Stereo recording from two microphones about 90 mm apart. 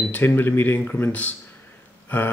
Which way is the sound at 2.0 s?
20° left (ahead or behind).